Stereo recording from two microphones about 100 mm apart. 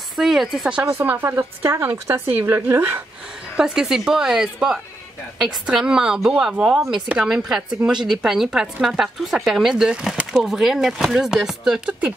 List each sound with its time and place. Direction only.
0.1 s speech: centre (ahead or behind)
0.9 s speech: 25° right (ahead or behind)
3.5 s speech: 5° right (ahead or behind)